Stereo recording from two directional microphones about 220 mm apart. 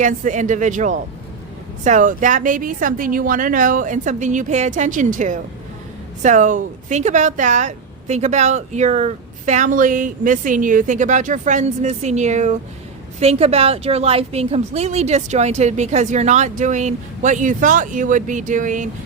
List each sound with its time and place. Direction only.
0.0 s speech: 35° right (ahead or behind)